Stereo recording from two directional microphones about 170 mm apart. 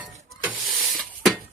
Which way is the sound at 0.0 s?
5° right (ahead or behind).